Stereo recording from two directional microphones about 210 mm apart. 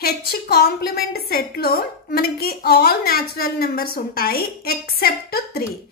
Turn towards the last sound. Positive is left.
turn(degrees=45)  # may be behind; listen again after turning